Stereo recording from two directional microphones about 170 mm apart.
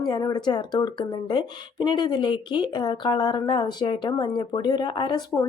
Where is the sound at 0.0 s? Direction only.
25° left (ahead or behind).